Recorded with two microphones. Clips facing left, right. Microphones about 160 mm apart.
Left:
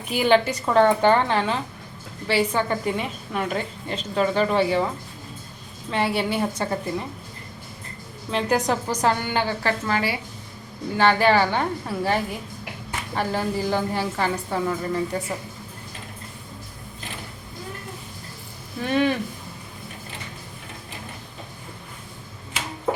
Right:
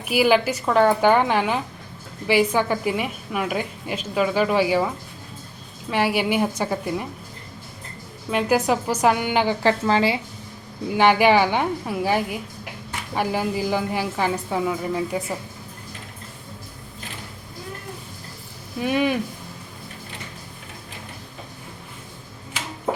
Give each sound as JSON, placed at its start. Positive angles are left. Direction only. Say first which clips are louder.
{"t": 0.0, "sound": "a woman's voice", "louder": "right 1 dB", "side_deg": -5}
{"t": 5.9, "sound": "a woman's voice", "louder": "right 2 dB", "side_deg": -10}
{"t": 8.3, "sound": "a woman's voice", "louder": "right 2 dB", "side_deg": -10}
{"t": 9.6, "sound": "a woman's voice", "louder": "right 5 dB", "side_deg": -25}
{"t": 10.9, "sound": "a woman's voice", "louder": "right 2 dB", "side_deg": -15}
{"t": 18.8, "sound": "a woman's voice", "louder": "even", "side_deg": -10}